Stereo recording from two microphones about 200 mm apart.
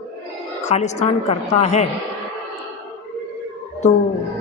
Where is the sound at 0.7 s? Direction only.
35° left (ahead or behind).